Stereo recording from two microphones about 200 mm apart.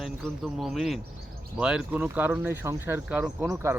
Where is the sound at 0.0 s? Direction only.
Centre (ahead or behind).